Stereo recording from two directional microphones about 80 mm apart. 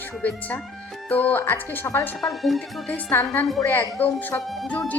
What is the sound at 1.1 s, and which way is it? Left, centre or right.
Speech, left.